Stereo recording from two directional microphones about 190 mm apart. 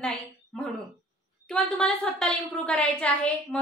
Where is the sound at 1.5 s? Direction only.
5° left (ahead or behind).